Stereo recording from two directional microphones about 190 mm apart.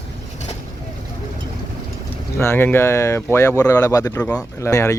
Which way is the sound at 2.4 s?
10° left (ahead or behind).